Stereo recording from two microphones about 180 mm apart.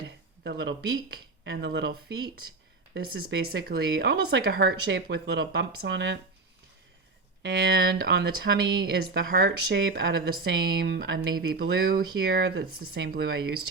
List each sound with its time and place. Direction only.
0.4 s speech: 70° right (ahead or behind)
7.4 s speech: 65° right (ahead or behind); by 11.3 s 85° right
11.3 s speech: 55° right (ahead or behind)